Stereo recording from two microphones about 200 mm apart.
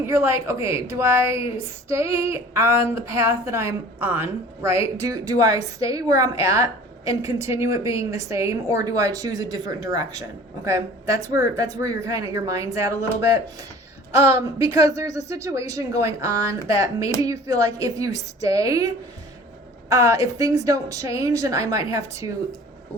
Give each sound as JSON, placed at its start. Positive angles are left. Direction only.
{"t": 0.0, "sound": "a woman's voice", "side_deg": -15}
{"t": 14.2, "sound": "a woman's voice", "side_deg": -15}